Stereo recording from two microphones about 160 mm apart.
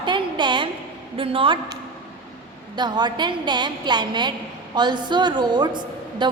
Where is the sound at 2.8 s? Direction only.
25° right (ahead or behind).